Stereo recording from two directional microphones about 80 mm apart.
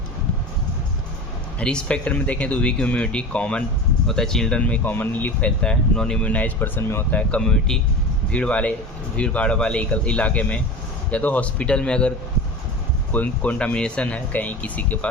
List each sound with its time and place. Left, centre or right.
1.5 s speech: centre
7.2 s speech: centre